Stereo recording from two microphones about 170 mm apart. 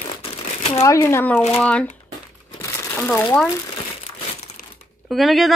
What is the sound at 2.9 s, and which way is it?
Speech, 10° left (ahead or behind).